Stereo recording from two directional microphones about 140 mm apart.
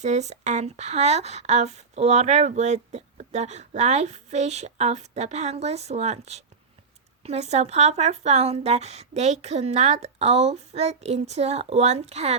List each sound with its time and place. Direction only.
0.0 s speech: 55° right (ahead or behind)